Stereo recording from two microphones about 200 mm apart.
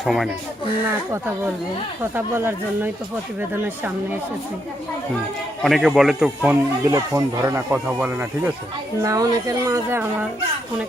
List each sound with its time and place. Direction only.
0.0 s speech: centre (ahead or behind)
2.0 s speech: 10° right (ahead or behind)
5.6 s speech: centre (ahead or behind)
6.8 s speech: 15° right (ahead or behind)